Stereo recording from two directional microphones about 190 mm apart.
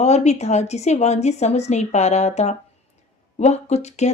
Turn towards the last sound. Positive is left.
turn(degrees=35)  # may be behind; listen again after turning